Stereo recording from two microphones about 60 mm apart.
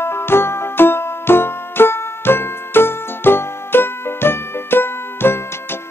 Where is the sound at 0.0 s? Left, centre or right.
Left.